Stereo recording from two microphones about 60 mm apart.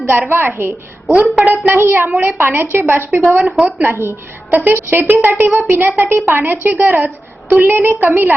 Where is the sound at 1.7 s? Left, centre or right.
Right.